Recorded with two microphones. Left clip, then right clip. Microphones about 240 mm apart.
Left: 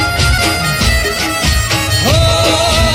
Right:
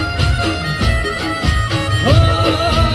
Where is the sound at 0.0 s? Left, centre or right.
Left.